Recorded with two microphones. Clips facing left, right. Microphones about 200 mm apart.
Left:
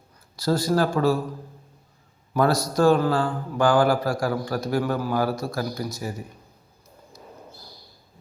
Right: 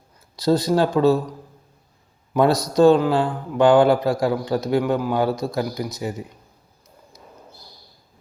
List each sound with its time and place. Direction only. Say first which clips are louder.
0.3 s a man's voice: right 4 dB; 20° right (ahead or behind)